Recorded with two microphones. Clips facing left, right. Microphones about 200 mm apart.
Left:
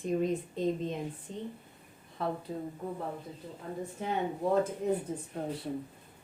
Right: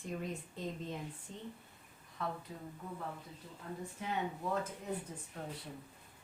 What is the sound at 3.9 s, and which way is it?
Speech, 40° left (ahead or behind).